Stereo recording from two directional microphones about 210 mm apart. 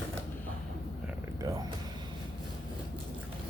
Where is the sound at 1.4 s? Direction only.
15° right (ahead or behind).